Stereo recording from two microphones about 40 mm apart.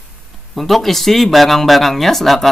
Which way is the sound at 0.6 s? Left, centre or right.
Centre.